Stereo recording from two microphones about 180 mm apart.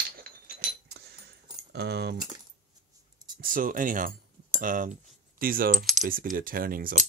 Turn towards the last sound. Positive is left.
turn(degrees=-55)  # may be behind; listen again after turning